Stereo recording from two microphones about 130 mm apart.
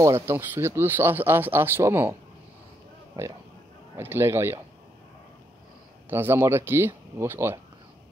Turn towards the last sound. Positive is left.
turn(degrees=-20)  # may be behind; listen again after turning